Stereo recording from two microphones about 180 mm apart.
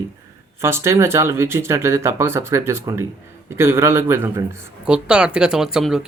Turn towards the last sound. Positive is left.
turn(degrees=-5)  # may be behind; listen again after turning